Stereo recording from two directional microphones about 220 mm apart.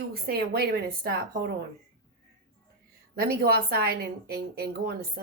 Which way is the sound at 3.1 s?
45° right (ahead or behind).